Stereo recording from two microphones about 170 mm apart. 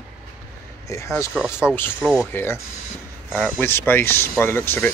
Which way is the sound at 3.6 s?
15° left (ahead or behind).